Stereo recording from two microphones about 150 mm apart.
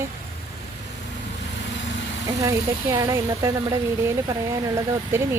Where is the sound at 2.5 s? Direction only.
20° right (ahead or behind).